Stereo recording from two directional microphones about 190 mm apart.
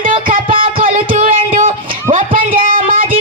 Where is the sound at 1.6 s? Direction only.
45° right (ahead or behind).